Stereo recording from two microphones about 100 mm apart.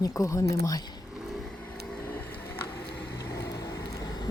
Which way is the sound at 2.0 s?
20° left (ahead or behind).